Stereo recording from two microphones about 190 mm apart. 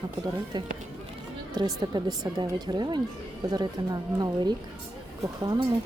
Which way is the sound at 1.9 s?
20° right (ahead or behind).